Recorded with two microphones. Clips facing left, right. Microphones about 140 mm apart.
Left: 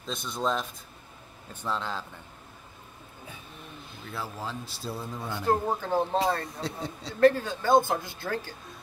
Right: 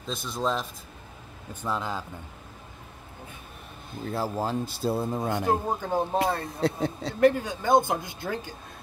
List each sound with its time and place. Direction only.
0.0 s speech: centre (ahead or behind)
4.0 s speech: 40° right (ahead or behind)
5.5 s speech: 15° right (ahead or behind)
6.6 s a man's voice: 55° right (ahead or behind)
7.2 s speech: 15° right (ahead or behind)